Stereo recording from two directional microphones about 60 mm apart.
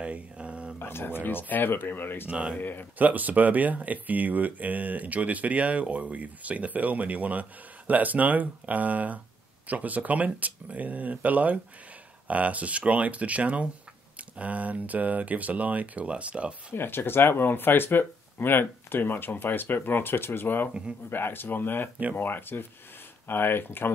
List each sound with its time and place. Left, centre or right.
0.0 s a sound: right
0.7 s speech: left
2.2 s speech: right
2.5 s speech: left
3.0 s speech: right
16.7 s speech: left